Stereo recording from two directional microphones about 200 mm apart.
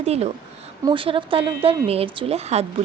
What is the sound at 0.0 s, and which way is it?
A woman's voice, 30° right (ahead or behind).